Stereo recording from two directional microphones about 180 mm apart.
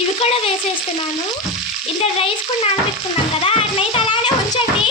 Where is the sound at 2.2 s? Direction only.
35° left (ahead or behind).